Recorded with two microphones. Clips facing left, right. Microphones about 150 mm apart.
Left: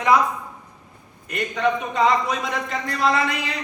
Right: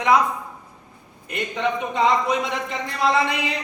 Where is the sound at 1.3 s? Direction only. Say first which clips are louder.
Left 2 dB; 25° right (ahead or behind).